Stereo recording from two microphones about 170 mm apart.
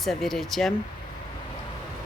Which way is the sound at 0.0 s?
Centre (ahead or behind).